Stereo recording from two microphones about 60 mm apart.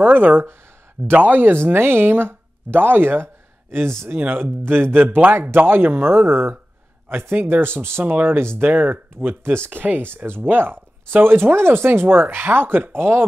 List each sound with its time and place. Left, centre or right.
0.0 s speech: right